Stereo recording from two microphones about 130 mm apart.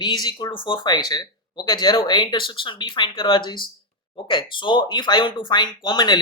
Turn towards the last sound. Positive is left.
turn(degrees=35)  # may be behind; listen again after turning